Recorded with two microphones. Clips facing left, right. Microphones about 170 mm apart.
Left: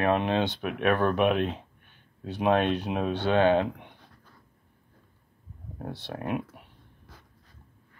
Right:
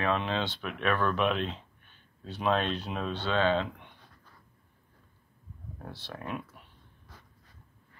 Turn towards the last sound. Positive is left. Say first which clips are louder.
# left 7 dB
turn(degrees=55)  # may be behind; listen again after turning